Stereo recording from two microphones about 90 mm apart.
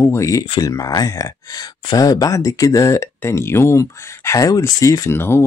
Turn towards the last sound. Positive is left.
turn(degrees=25)  # may be behind; listen again after turning